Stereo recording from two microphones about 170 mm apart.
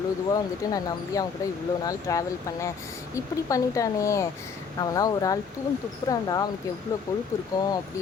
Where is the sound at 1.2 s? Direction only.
20° left (ahead or behind).